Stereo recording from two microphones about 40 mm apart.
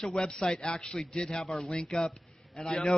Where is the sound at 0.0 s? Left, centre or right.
Centre.